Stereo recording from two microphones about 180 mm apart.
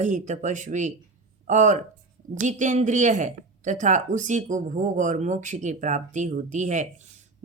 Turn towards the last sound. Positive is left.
turn(degrees=-45)  # may be behind; listen again after turning